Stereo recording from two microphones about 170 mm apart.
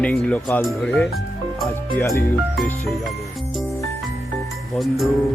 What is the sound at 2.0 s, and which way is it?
Speech, 15° left (ahead or behind).